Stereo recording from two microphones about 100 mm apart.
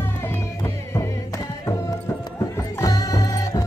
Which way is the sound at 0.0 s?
20° left (ahead or behind).